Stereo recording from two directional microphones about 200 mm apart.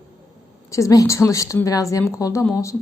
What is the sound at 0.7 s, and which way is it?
A woman's voice, 15° left (ahead or behind).